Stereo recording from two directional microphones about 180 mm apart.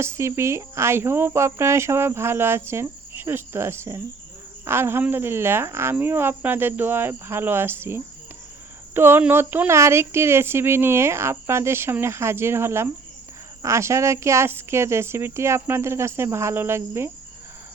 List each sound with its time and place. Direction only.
0.0 s cricket: 15° right (ahead or behind)